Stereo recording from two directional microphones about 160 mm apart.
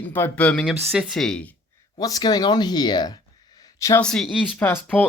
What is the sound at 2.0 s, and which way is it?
Speech, 25° left (ahead or behind).